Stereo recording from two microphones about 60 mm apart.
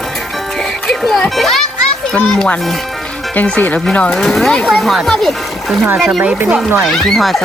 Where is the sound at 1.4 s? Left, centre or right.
Centre.